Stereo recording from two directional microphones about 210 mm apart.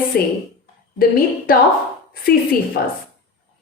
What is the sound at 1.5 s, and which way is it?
Speech, 45° left (ahead or behind).